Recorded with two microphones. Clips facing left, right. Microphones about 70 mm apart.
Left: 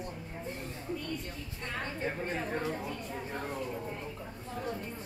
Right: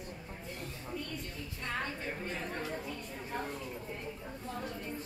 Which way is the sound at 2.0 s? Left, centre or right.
Left.